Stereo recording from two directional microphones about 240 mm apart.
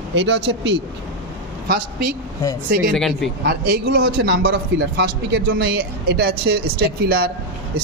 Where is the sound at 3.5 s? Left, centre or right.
Right.